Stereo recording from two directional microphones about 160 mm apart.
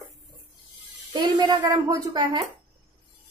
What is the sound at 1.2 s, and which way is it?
A woman's voice, 25° right (ahead or behind).